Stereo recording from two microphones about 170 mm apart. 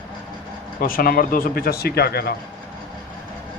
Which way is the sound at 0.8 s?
60° left (ahead or behind).